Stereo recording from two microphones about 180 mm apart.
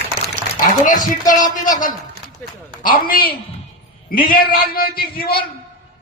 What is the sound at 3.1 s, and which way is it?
Speech, 55° left (ahead or behind).